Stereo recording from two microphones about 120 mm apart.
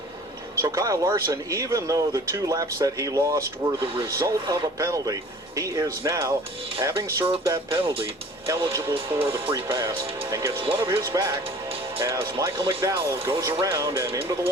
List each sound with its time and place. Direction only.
0.6 s speech: 25° right (ahead or behind)
8.4 s speech: 25° right (ahead or behind)